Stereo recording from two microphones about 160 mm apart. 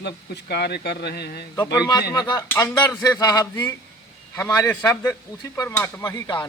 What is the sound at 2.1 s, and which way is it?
A man's voice, 25° left (ahead or behind).